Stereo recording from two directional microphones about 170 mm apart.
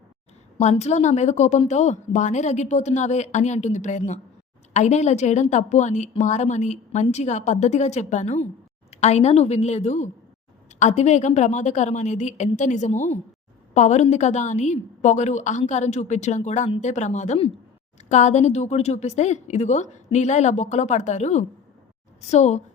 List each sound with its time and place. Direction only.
0.6 s a woman's voice: 40° left (ahead or behind)